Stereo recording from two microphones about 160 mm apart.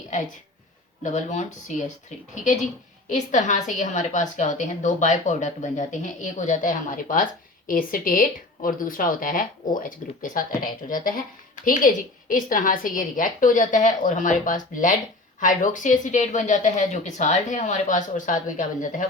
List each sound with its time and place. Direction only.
1.0 s a woman's voice: 50° left (ahead or behind)